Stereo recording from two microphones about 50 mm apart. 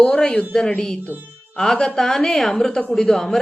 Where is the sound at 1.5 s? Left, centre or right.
Centre.